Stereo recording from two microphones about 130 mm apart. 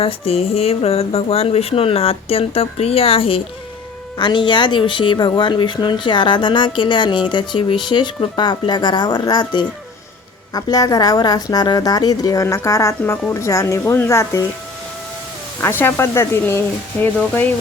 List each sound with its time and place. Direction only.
0.0 s a sound: 50° left (ahead or behind)
4.2 s a woman's voice: 35° left (ahead or behind); by 14.4 s 20° left (ahead or behind)
15.6 s a woman's voice: 15° left (ahead or behind)